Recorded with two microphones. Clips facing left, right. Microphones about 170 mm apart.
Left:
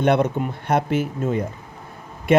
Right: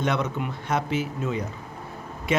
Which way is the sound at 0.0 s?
55° left (ahead or behind).